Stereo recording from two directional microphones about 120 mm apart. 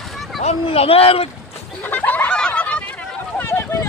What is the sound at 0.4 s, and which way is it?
Speech, 60° left (ahead or behind).